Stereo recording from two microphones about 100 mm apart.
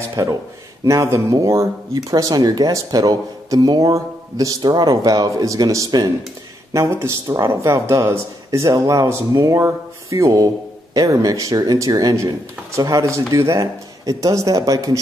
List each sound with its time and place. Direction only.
0.1 s speech: 35° right (ahead or behind)